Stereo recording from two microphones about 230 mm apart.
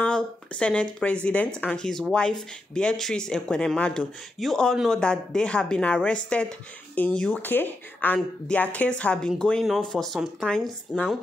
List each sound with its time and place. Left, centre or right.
0.0 s speech: centre